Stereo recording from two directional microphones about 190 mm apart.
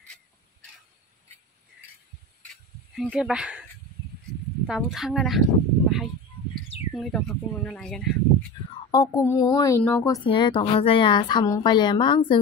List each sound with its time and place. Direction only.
2.9 s speech: centre (ahead or behind)
4.6 s speech: centre (ahead or behind)
8.9 s speech: 20° left (ahead or behind)
10.2 s a woman's voice: 25° left (ahead or behind)